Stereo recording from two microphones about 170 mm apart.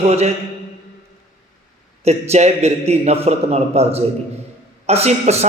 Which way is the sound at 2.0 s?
40° right (ahead or behind).